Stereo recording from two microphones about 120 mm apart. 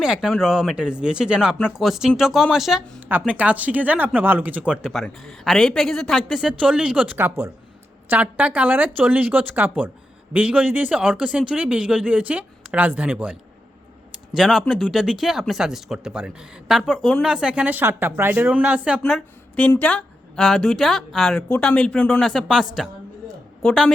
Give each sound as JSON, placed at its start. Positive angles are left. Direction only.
{"t": 0.0, "sound": "speech", "side_deg": -5}
{"t": 3.1, "sound": "speech", "side_deg": -15}
{"t": 4.9, "sound": "speech", "side_deg": 5}
{"t": 14.3, "sound": "speech", "side_deg": -5}
{"t": 17.3, "sound": "speech", "side_deg": -10}
{"t": 18.9, "sound": "a woman's voice", "side_deg": 5}